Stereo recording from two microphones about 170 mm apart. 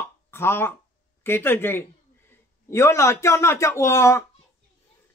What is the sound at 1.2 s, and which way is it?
A man's voice, 15° left (ahead or behind).